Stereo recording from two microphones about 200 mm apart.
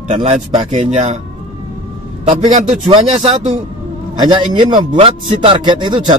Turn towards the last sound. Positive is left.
turn(degrees=-25)  # may be behind; listen again after turning